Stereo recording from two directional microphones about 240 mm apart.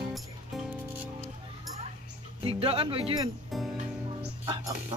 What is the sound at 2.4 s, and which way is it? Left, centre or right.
Speech, right.